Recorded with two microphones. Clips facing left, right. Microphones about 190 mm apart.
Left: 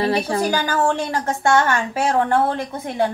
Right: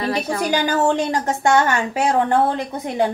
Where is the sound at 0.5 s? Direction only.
15° right (ahead or behind).